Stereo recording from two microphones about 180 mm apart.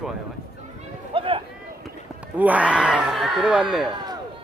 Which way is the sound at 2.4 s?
10° right (ahead or behind).